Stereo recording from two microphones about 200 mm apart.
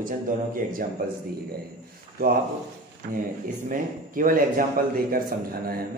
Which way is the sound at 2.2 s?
45° right (ahead or behind).